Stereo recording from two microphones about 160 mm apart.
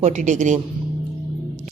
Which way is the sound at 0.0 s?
45° right (ahead or behind).